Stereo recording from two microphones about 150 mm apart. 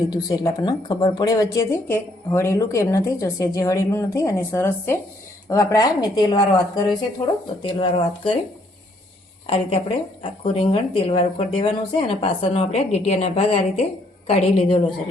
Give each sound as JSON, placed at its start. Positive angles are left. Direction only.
{"t": 0.1, "sound": "speech", "side_deg": 25}
{"t": 9.5, "sound": "speech", "side_deg": 40}